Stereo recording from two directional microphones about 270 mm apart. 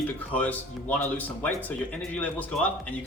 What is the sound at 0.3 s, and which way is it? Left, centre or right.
Speech, centre.